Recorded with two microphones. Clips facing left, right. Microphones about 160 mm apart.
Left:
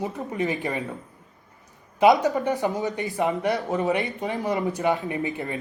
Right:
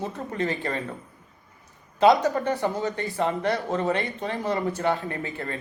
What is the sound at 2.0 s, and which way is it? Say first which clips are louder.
A man's voice: left 1 dB; 20° left (ahead or behind).